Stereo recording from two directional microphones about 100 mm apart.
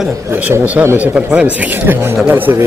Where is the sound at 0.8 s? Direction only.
15° right (ahead or behind).